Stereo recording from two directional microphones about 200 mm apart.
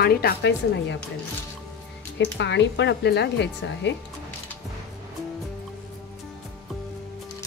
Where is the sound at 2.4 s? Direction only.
60° left (ahead or behind).